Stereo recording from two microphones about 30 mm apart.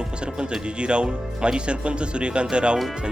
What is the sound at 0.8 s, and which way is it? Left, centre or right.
Speech, right.